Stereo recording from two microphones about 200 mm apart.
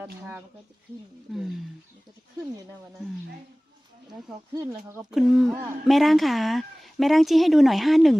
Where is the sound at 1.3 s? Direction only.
Centre (ahead or behind).